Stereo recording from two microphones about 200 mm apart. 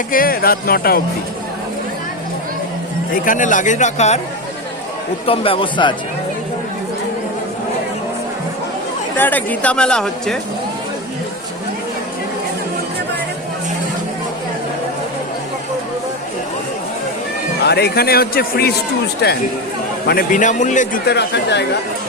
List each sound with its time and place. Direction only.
0.1 s speech: 45° left (ahead or behind)
3.2 s a man's voice: 40° left (ahead or behind)
5.2 s speech: 25° left (ahead or behind)
9.1 s speech: 10° left (ahead or behind)
17.6 s speech: 55° left (ahead or behind)
20.1 s a man's voice: 45° left (ahead or behind)
21.1 s speech: 55° left (ahead or behind)